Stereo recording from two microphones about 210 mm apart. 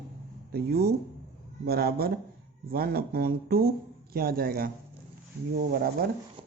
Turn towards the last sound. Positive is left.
turn(degrees=-45)  # may be behind; listen again after turning